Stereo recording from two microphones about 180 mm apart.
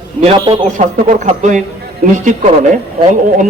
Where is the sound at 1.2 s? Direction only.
45° right (ahead or behind).